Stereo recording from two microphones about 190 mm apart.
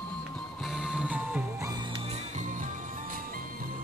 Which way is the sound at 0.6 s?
Centre (ahead or behind).